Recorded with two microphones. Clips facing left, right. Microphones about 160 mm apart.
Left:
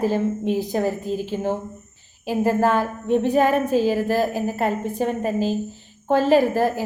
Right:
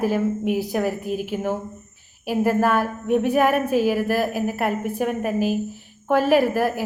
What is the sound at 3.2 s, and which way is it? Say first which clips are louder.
Speech: left 1 dB; 10° right (ahead or behind).